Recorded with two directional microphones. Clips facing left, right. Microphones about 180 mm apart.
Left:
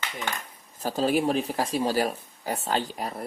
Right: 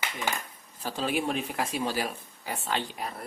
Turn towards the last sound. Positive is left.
turn(degrees=40)  # may be behind; listen again after turning